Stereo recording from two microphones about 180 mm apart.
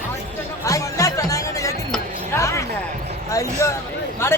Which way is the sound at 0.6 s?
20° left (ahead or behind).